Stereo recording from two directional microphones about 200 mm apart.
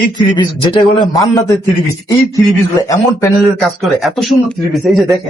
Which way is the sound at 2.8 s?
15° left (ahead or behind).